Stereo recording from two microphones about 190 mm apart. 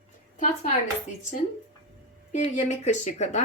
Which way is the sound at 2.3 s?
40° left (ahead or behind).